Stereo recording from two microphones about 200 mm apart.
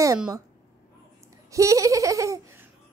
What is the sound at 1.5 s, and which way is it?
Baby laughter, 15° right (ahead or behind).